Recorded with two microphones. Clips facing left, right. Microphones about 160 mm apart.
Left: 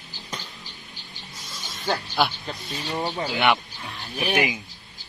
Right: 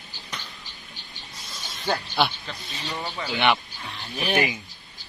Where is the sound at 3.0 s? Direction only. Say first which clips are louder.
Left 6 dB; 35° left (ahead or behind).